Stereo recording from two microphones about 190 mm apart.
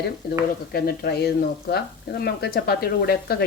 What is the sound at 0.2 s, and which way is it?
Speech, 55° left (ahead or behind).